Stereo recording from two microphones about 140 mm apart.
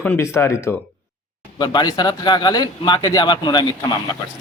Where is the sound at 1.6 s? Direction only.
30° left (ahead or behind).